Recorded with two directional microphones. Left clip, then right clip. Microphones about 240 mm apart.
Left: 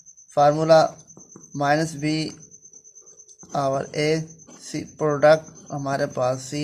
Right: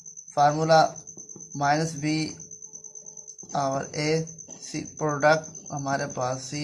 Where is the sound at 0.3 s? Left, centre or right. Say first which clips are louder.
Left 4 dB; left.